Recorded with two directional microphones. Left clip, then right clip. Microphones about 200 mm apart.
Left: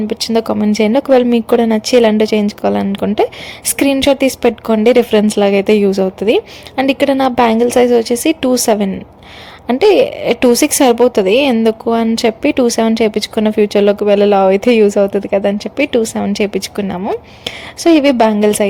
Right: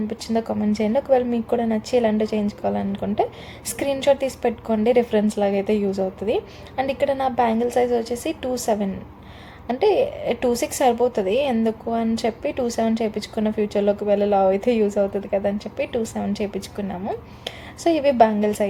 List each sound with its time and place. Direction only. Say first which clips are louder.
0.1 s a woman's voice: left 11 dB; 40° left (ahead or behind)